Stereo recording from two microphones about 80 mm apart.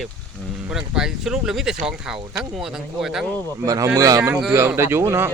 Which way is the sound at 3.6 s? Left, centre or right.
Right.